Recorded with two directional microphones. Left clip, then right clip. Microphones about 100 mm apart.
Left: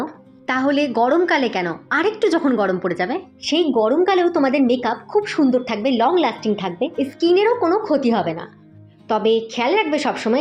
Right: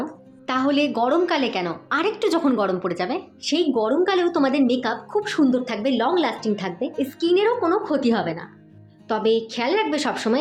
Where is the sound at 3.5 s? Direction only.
30° left (ahead or behind).